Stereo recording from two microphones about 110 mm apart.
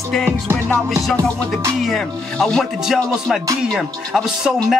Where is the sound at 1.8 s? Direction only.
5° left (ahead or behind).